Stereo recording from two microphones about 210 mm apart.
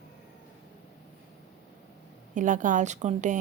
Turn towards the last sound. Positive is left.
turn(degrees=-35)  # may be behind; listen again after turning